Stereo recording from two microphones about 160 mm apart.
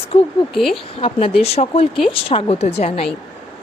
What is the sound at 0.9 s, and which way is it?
Speech, 35° left (ahead or behind).